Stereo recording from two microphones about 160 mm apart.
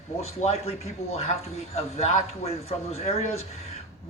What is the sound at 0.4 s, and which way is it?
A man's voice, 40° left (ahead or behind).